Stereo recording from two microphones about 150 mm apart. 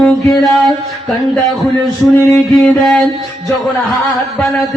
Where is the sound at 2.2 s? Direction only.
5° left (ahead or behind).